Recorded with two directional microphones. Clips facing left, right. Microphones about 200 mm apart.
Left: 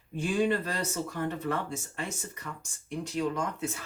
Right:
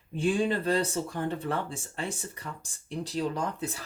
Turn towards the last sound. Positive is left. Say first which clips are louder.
# even
turn(degrees=-35)  # may be behind; listen again after turning